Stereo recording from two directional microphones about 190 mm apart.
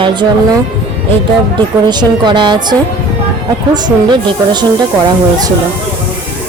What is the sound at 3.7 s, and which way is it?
Speech, 25° right (ahead or behind).